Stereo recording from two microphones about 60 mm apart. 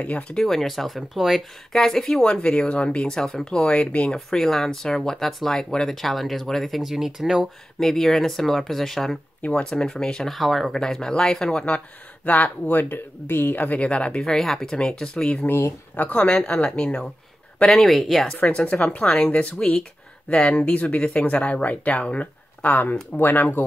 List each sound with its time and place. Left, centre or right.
0.0 s speech: left
0.4 s speech: centre
1.7 s speech: centre
2.2 s speech: centre
4.3 s speech: centre
7.8 s speech: centre
10.8 s speech: centre
14.2 s speech: centre
18.4 s speech: centre; by 23.6 s left